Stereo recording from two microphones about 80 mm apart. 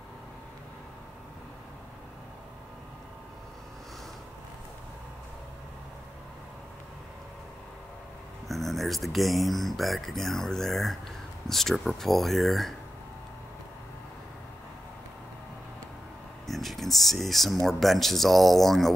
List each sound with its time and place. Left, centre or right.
8.5 s speech: centre
16.4 s speech: centre